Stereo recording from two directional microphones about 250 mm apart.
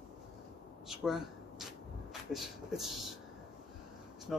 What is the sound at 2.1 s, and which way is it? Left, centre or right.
Speech, centre.